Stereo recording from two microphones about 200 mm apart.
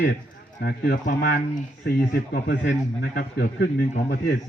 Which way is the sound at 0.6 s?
50° left (ahead or behind).